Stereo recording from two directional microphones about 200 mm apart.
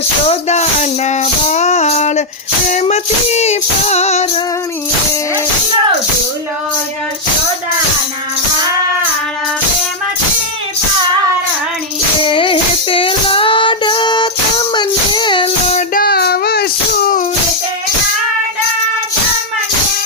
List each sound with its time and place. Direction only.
0.3 s music: 35° left (ahead or behind)
12.2 s music: 25° left (ahead or behind)
16.0 s child singing: 50° left (ahead or behind)